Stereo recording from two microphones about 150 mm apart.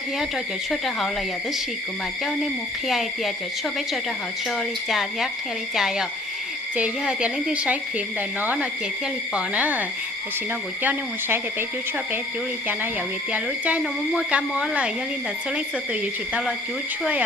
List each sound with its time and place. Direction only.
0.7 s speech: centre (ahead or behind)
2.8 s speech: centre (ahead or behind)
4.4 s speech: centre (ahead or behind)
13.3 s speech: 10° right (ahead or behind)